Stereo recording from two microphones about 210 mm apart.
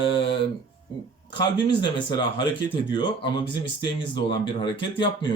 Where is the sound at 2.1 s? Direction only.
20° left (ahead or behind).